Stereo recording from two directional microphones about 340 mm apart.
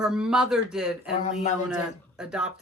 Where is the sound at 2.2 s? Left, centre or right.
Centre.